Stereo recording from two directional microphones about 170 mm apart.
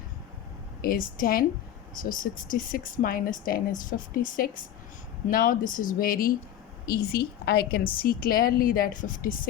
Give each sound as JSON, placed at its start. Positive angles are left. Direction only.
{"t": 0.8, "sound": "speech", "side_deg": 55}
{"t": 6.8, "sound": "a woman's voice", "side_deg": 65}
{"t": 7.9, "sound": "speech", "side_deg": 60}